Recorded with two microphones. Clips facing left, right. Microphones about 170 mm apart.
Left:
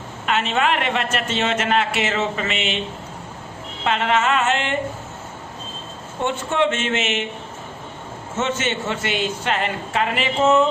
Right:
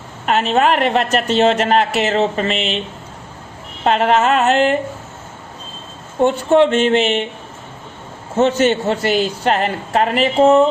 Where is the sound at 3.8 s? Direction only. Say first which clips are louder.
Right 6 dB; 40° right (ahead or behind).